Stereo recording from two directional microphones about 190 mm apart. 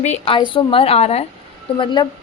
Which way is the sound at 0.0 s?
35° left (ahead or behind).